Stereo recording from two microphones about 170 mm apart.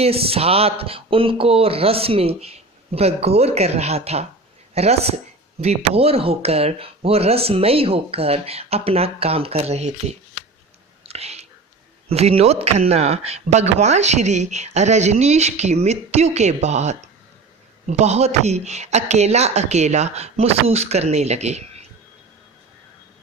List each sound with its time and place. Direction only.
0.0 s speech: 35° right (ahead or behind)
11.0 s whispering: 35° right (ahead or behind)
12.0 s speech: 35° right (ahead or behind)